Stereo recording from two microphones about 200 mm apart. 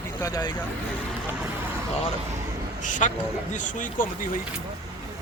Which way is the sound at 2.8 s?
40° left (ahead or behind).